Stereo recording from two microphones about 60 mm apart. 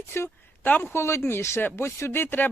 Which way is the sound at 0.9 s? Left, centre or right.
Left.